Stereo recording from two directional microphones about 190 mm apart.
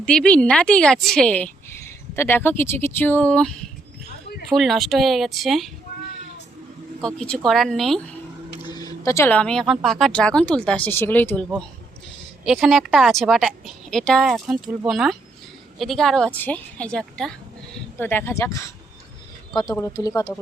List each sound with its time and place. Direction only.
0.0 s a woman's voice: 5° left (ahead or behind)
7.0 s a woman's voice: 5° left (ahead or behind)
8.6 s a woman's voice: 20° left (ahead or behind)
12.5 s a woman's voice: centre (ahead or behind); by 18.6 s 15° left (ahead or behind)
19.7 s a woman's voice: 15° left (ahead or behind)